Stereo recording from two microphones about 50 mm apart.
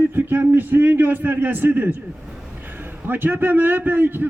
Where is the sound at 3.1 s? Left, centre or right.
Right.